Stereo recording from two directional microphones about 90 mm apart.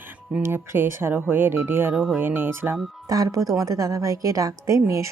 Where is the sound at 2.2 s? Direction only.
25° right (ahead or behind).